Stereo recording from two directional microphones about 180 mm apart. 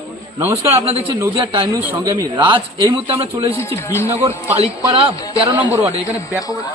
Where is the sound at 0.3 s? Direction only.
15° right (ahead or behind).